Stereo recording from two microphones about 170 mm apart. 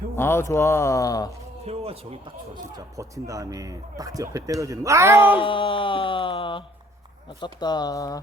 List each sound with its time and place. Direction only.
0.2 s speech: 15° left (ahead or behind)
1.6 s speech: 35° right (ahead or behind)
2.7 s speech: 20° right (ahead or behind)
5.4 s speech: 30° left (ahead or behind)